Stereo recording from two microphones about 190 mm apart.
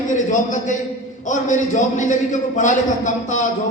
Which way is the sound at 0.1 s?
40° left (ahead or behind).